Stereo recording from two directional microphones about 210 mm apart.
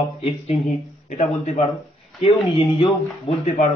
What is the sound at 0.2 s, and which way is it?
A man's voice, 30° left (ahead or behind).